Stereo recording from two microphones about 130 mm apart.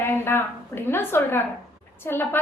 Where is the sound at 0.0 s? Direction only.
15° left (ahead or behind).